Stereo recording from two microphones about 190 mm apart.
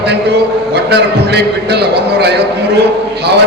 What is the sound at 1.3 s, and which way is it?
A man's voice, 60° right (ahead or behind).